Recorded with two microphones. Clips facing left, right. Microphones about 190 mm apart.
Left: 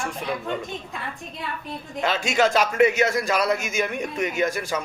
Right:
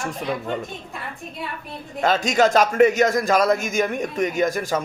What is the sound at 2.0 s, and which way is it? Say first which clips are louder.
A man's voice: right 3 dB; 40° right (ahead or behind).